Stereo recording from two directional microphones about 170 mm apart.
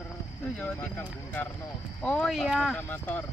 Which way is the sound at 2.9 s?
10° left (ahead or behind).